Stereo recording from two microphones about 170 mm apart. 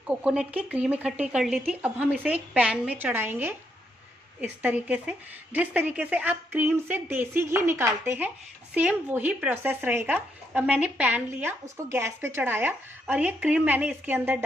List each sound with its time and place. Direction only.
0.0 s speech: 5° right (ahead or behind)